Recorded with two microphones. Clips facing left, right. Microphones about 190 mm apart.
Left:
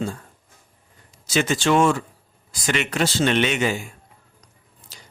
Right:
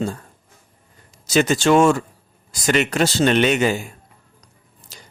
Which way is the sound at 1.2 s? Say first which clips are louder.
Right 4 dB; 40° right (ahead or behind).